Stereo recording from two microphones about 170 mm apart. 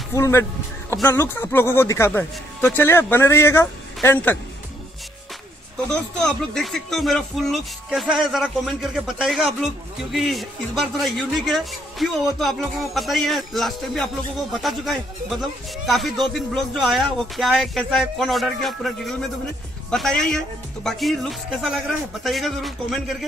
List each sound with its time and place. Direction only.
0.1 s speech: 15° left (ahead or behind)
6.2 s speech: 5° left (ahead or behind)
19.9 s speech: centre (ahead or behind)